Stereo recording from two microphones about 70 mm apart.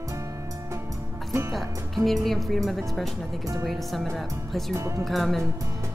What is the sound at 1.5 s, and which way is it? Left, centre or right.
A woman's voice, centre.